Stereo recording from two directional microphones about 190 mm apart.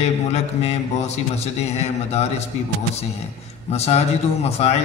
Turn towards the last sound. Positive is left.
turn(degrees=35)  # may be behind; listen again after turning